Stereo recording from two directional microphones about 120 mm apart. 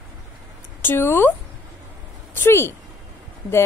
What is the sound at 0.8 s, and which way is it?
Speech, 20° left (ahead or behind).